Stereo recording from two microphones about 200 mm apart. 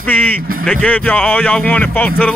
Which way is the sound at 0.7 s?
5° left (ahead or behind).